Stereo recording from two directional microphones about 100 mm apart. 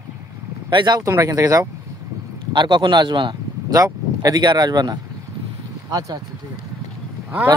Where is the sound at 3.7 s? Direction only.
35° right (ahead or behind).